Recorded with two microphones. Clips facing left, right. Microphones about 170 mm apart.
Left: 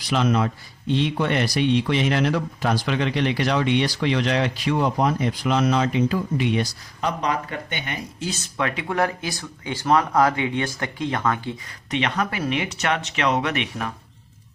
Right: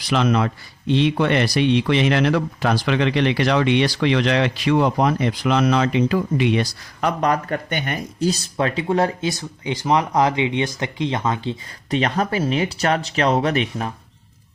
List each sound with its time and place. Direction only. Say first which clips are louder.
0.1 s speech: right 2 dB; 90° right
7.2 s speech: right 5 dB; 50° right (ahead or behind); by 13.9 s 35° right (ahead or behind)